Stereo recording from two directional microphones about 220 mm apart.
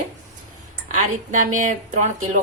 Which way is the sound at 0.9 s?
35° right (ahead or behind).